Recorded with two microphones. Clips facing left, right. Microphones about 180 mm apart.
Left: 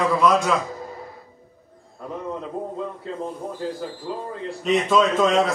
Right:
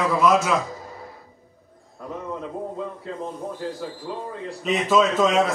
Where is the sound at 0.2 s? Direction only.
5° right (ahead or behind).